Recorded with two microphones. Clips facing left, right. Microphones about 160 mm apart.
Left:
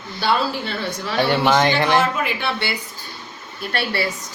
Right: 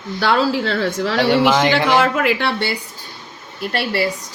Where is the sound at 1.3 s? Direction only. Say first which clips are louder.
Right 2 dB; 10° right (ahead or behind).